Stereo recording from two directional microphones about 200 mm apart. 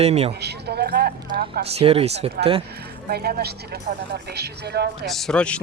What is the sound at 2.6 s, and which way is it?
Speech, 55° right (ahead or behind).